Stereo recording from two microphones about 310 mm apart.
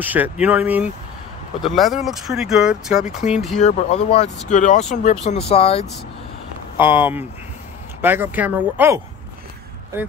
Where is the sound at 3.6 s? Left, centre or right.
Centre.